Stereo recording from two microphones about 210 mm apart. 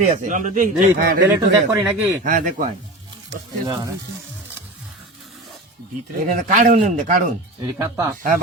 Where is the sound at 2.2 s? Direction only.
35° right (ahead or behind).